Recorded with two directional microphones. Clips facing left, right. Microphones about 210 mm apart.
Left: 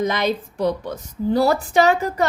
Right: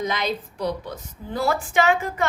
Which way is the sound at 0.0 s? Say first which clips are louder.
Left 5 dB; 45° left (ahead or behind).